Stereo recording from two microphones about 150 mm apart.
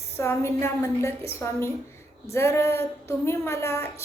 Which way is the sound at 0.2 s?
15° left (ahead or behind).